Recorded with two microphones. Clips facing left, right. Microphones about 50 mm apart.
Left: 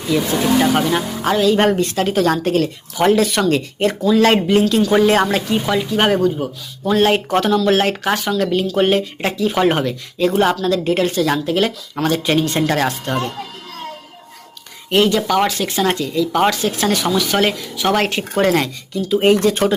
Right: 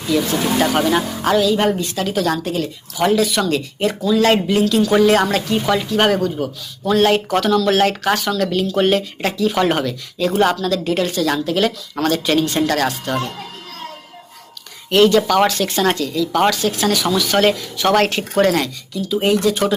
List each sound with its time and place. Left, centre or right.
0.6 s speech: centre
1.2 s speech: left
1.5 s a woman's voice: left
4.8 s speech: centre
9.8 s speech: left
10.3 s speech: centre
10.7 s speech: left
14.8 s speech: centre; by 17.1 s left
17.1 s speech: centre
18.4 s a woman's voice: left